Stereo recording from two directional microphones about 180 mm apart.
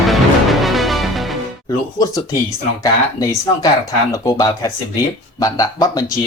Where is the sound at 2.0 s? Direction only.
20° left (ahead or behind).